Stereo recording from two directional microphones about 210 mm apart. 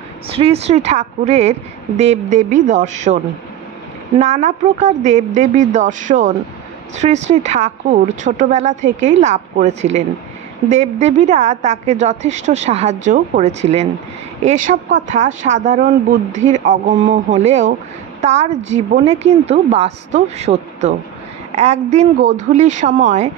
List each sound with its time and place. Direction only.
0.3 s speech: 30° right (ahead or behind)
4.2 s speech: 35° right (ahead or behind)